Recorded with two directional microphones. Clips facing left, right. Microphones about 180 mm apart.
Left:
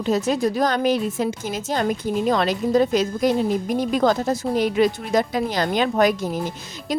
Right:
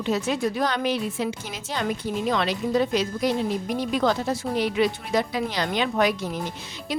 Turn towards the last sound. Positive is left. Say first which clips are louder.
# left 4 dB
turn(degrees=45)  # may be behind; listen again after turning